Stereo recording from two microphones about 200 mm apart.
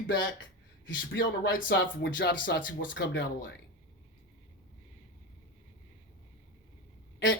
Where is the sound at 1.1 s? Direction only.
45° left (ahead or behind).